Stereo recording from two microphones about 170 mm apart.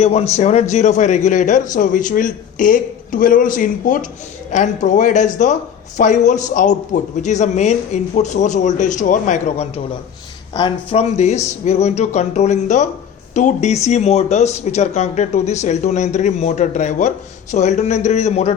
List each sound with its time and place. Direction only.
0.0 s a man's voice: 40° left (ahead or behind)